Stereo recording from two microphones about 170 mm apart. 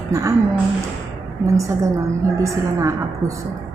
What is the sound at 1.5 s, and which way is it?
A woman's voice, 20° right (ahead or behind).